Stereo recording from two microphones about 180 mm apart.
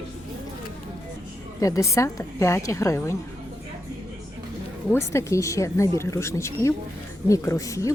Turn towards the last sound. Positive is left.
turn(degrees=15)  # may be behind; listen again after turning